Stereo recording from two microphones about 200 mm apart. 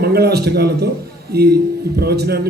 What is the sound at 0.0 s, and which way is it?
Speech, 55° right (ahead or behind).